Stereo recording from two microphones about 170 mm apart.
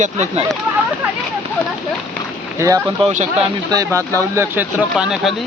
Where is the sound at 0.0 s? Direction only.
45° right (ahead or behind).